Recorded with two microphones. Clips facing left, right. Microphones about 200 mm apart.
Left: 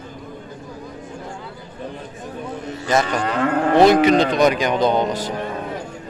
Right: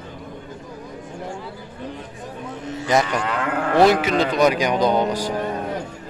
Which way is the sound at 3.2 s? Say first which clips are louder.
Left 4 dB; 30° left (ahead or behind).